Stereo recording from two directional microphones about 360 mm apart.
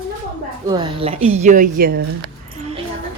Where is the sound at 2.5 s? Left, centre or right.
Centre.